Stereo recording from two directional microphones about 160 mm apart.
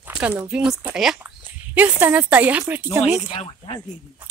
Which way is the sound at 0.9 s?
5° right (ahead or behind).